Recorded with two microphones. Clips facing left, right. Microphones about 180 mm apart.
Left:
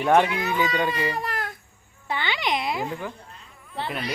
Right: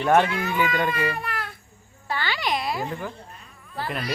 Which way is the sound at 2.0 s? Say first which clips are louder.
Even; 20° left (ahead or behind).